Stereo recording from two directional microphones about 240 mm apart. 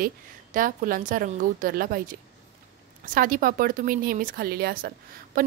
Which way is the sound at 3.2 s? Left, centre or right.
Right.